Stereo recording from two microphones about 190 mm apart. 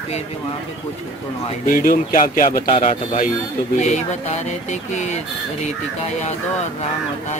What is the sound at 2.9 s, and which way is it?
Speech, 40° left (ahead or behind).